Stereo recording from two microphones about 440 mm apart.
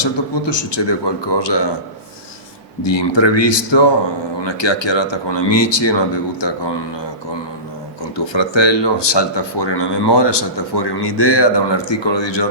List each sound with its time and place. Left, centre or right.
0.0 s speech: left
2.8 s speech: left
8.1 s speech: left